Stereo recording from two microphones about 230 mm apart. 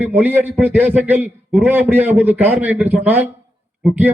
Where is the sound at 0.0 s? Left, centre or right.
Centre.